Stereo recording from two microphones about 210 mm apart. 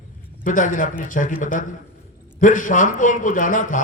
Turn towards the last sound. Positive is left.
turn(degrees=40)  # may be behind; listen again after turning